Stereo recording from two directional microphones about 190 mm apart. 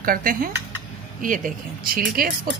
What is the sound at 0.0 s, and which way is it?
Speech, 50° right (ahead or behind).